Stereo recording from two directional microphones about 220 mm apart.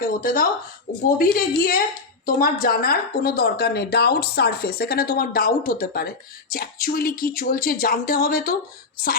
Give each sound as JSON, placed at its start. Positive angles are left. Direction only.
{"t": 0.0, "sound": "a woman's voice", "side_deg": 40}